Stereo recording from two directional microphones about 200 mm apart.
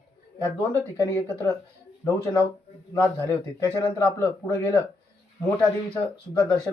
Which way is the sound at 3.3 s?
15° left (ahead or behind).